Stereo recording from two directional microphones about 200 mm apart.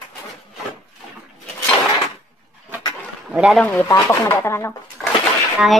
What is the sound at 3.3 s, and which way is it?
Speech, 5° right (ahead or behind).